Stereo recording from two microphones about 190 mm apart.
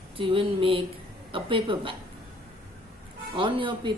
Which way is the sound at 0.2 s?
30° right (ahead or behind).